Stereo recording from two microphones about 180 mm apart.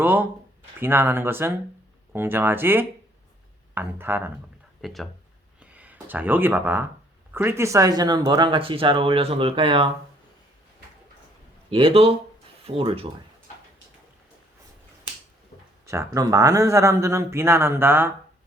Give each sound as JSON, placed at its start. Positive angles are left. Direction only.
{"t": 0.0, "sound": "speech", "side_deg": -10}
{"t": 4.8, "sound": "speech", "side_deg": 0}
{"t": 5.5, "sound": "a sound", "side_deg": -10}
{"t": 7.3, "sound": "speech", "side_deg": -15}
{"t": 11.7, "sound": "speech", "side_deg": -30}
{"t": 15.9, "sound": "speech", "side_deg": -20}